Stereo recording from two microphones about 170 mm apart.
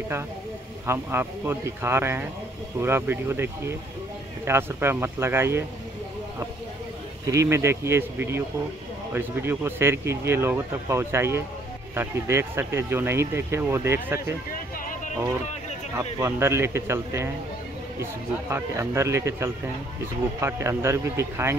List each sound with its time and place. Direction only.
0.8 s speech: 15° right (ahead or behind)
7.2 s speech: 15° right (ahead or behind)
16.0 s speech: 15° right (ahead or behind)
18.5 s speech: 15° right (ahead or behind)